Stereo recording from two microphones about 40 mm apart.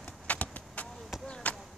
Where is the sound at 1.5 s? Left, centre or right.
Left.